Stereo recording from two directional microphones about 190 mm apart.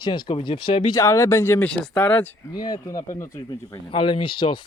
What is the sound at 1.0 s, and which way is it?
Speech, 15° left (ahead or behind).